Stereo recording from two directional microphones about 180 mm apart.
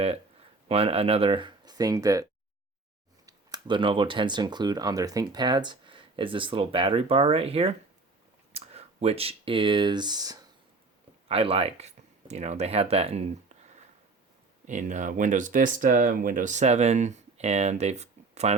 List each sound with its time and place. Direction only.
0.7 s speech: 30° right (ahead or behind)
3.2 s speech: 25° right (ahead or behind)
11.3 s speech: 30° right (ahead or behind)
14.7 s speech: 45° right (ahead or behind)